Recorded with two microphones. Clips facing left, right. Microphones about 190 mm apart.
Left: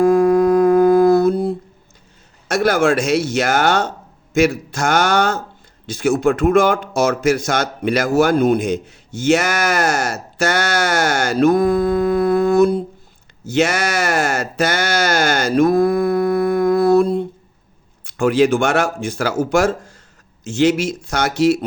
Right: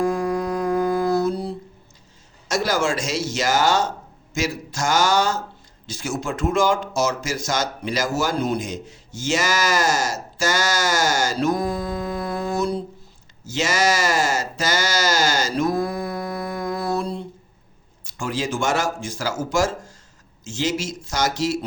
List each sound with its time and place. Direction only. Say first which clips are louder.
0.0 s humming: left 10 dB; 55° left (ahead or behind)
2.5 s speech: left 6 dB; 60° left (ahead or behind)